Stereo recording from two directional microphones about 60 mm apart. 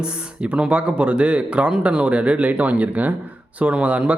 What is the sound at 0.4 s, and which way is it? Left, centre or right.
Speech, centre.